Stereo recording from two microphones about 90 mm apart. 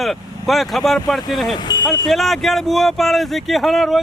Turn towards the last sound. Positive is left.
turn(degrees=0)  # may be behind; listen again after turning